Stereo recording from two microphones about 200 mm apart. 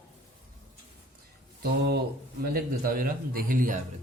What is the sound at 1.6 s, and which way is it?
A man's voice, 55° right (ahead or behind).